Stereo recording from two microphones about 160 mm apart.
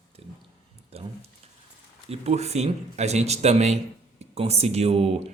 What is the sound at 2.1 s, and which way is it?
Speech, 40° right (ahead or behind).